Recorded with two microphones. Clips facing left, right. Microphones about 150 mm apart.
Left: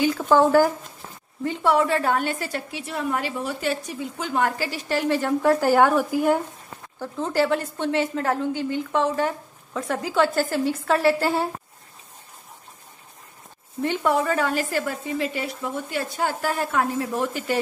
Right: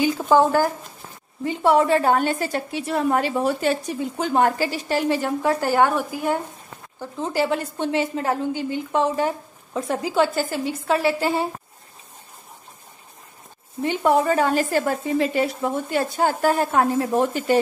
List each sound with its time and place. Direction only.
0.2 s speech: 5° right (ahead or behind)
1.7 s a woman's voice: 25° right (ahead or behind)
2.5 s speech: 40° right (ahead or behind)
4.6 s a woman's voice: 20° right (ahead or behind); by 6.4 s 5° left (ahead or behind)
7.2 s a woman's voice: 10° right (ahead or behind)
10.3 s a woman's voice: centre (ahead or behind)
14.0 s a woman's voice: 25° right (ahead or behind)